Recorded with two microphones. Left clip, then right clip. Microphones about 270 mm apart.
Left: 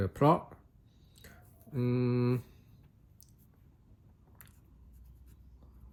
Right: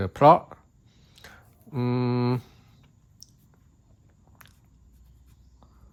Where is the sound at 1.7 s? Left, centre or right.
Centre.